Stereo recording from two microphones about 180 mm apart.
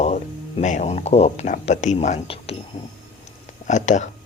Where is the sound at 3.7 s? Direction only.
40° left (ahead or behind).